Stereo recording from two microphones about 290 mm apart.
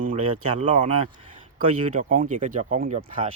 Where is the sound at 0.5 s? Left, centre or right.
Right.